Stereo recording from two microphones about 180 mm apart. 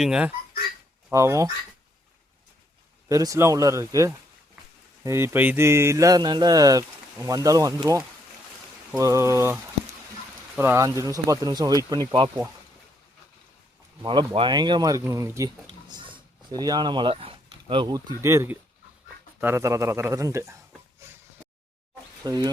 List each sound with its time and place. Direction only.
0.0 s speech: 5° right (ahead or behind)
1.1 s a man's voice: 15° right (ahead or behind)
3.1 s a man's voice: 15° right (ahead or behind)
14.0 s speech: 25° right (ahead or behind)
15.9 s a sound: 25° right (ahead or behind)
18.2 s a man's voice: 15° right (ahead or behind)
22.2 s speech: 20° right (ahead or behind)